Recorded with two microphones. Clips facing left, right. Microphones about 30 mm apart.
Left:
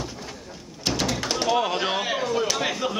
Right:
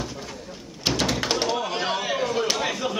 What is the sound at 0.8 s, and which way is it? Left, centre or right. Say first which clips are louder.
Thunk: right 2 dB; centre.